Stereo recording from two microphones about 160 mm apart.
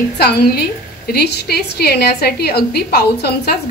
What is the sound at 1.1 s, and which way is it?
A woman's voice, 90° left.